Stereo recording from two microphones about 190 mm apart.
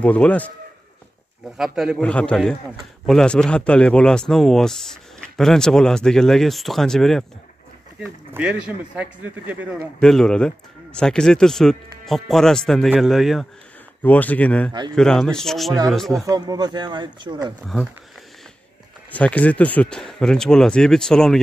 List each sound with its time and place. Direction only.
0.0 s speech: 5° left (ahead or behind)
1.6 s speech: centre (ahead or behind)
8.3 s speech: 5° right (ahead or behind)
9.9 s speech: 5° left (ahead or behind)
16.3 s speech: 20° right (ahead or behind)
19.1 s speech: 5° left (ahead or behind)